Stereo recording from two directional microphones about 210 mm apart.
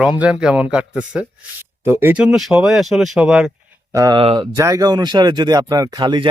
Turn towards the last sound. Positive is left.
turn(degrees=-20)  # may be behind; listen again after turning